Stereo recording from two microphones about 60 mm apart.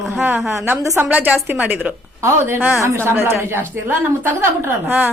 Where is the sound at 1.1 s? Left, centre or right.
Right.